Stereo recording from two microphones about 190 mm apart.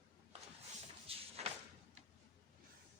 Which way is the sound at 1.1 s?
30° right (ahead or behind).